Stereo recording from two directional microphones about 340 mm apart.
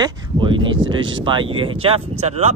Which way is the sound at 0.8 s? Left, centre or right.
Right.